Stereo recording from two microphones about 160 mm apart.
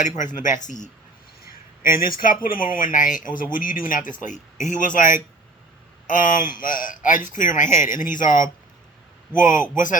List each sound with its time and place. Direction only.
0.0 s speech: 50° left (ahead or behind)
1.4 s a sound: 60° left (ahead or behind)
2.0 s speech: 60° left (ahead or behind)
9.7 s speech: 55° left (ahead or behind)